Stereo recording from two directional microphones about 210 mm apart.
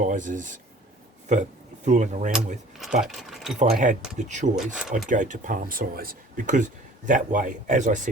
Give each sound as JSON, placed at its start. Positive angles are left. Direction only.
{"t": 0.0, "sound": "speech", "side_deg": -40}
{"t": 3.0, "sound": "speech", "side_deg": 0}
{"t": 3.6, "sound": "speech", "side_deg": -35}
{"t": 4.5, "sound": "speech", "side_deg": -5}
{"t": 5.0, "sound": "speech", "side_deg": -35}